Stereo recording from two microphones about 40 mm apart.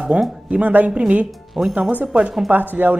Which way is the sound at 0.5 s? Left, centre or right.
Right.